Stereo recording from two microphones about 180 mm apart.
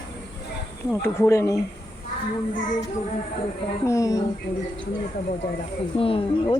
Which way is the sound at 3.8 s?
15° left (ahead or behind).